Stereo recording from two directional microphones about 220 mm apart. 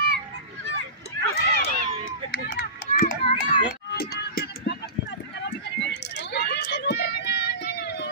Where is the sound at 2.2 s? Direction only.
40° left (ahead or behind).